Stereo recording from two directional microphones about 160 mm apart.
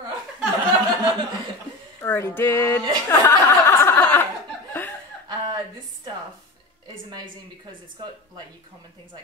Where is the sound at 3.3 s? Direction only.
20° left (ahead or behind).